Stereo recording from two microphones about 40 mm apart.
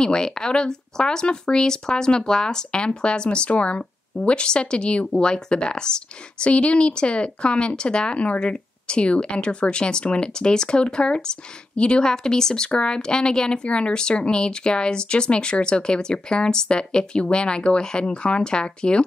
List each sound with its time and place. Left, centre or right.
0.0 s speech: centre
12.1 s speech: centre